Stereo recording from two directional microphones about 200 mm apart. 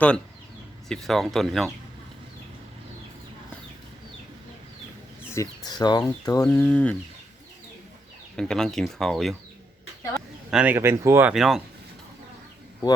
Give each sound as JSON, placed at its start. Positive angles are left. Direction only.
{"t": 0.9, "sound": "speech", "side_deg": 0}
{"t": 5.3, "sound": "speech", "side_deg": 20}
{"t": 6.5, "sound": "speech", "side_deg": 5}
{"t": 8.4, "sound": "speech", "side_deg": 5}
{"t": 10.5, "sound": "speech", "side_deg": -5}